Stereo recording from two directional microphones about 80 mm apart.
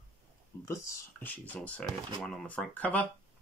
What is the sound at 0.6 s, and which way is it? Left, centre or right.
Speech, left.